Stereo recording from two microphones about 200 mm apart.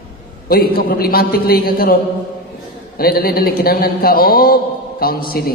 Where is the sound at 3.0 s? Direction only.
50° left (ahead or behind).